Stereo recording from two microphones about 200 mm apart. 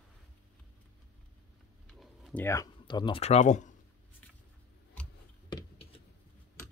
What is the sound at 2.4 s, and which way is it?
Speech, 15° left (ahead or behind).